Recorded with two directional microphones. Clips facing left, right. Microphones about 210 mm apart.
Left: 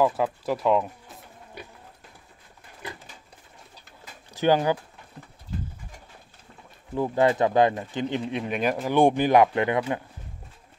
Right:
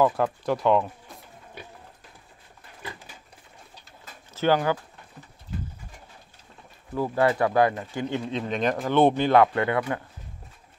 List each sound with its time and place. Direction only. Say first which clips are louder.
0.0 s speech: right 1 dB; 5° left (ahead or behind)
4.0 s pigeon: left 1 dB; 15° left (ahead or behind)
7.0 s speech: left 1 dB; 20° left (ahead or behind)